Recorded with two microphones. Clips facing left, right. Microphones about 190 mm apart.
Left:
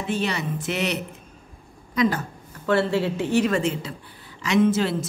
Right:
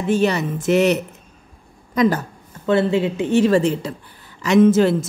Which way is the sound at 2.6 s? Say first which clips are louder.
Right 4 dB; 20° right (ahead or behind).